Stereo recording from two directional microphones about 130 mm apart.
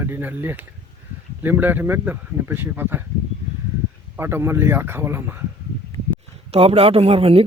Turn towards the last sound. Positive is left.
turn(degrees=-45)  # may be behind; listen again after turning